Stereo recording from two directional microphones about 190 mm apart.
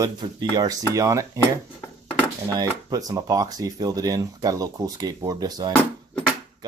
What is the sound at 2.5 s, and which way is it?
Speech, 20° right (ahead or behind).